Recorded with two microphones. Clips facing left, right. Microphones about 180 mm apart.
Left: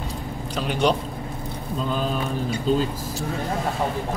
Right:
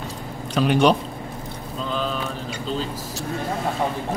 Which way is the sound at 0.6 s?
65° right (ahead or behind).